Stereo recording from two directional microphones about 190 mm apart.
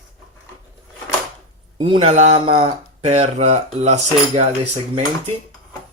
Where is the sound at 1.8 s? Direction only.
30° right (ahead or behind).